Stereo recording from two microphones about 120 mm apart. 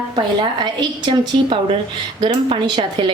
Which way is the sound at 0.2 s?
40° right (ahead or behind).